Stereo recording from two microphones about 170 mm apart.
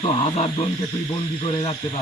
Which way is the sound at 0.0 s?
35° left (ahead or behind).